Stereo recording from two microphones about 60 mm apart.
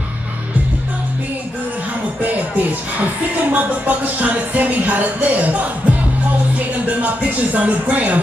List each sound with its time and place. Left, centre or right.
2.2 s music: right